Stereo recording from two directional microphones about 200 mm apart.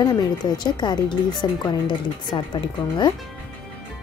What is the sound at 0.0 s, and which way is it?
Speech, 20° left (ahead or behind).